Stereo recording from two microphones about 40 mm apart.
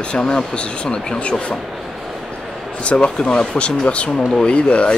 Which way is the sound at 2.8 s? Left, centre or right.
Left.